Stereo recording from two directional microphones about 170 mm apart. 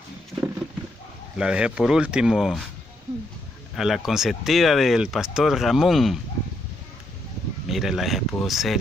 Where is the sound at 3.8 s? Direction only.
Centre (ahead or behind).